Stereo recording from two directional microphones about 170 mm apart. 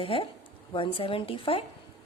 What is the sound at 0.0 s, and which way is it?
A woman's voice, 30° left (ahead or behind).